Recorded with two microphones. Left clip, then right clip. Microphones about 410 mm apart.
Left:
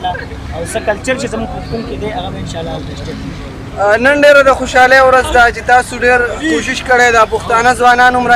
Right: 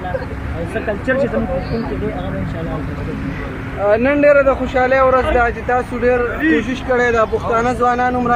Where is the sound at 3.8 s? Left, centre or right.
Left.